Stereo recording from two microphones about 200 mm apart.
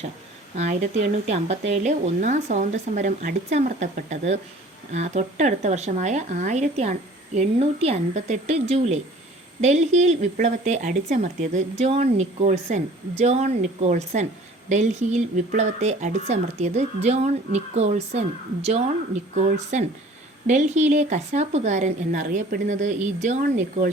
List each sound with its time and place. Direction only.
0.5 s speech: 35° right (ahead or behind)